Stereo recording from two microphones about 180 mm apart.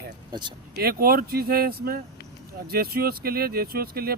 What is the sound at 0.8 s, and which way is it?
Speech, 55° right (ahead or behind).